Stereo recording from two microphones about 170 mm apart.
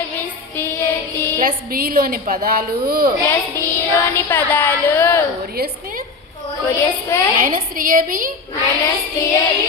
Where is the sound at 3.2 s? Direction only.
15° left (ahead or behind).